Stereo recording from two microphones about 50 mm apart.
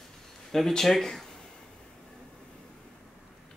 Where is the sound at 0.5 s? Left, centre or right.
Centre.